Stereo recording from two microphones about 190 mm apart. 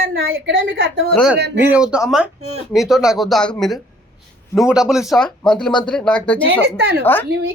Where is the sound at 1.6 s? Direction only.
5° right (ahead or behind).